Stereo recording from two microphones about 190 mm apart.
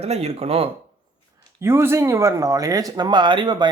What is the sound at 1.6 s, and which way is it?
Speech, 15° right (ahead or behind).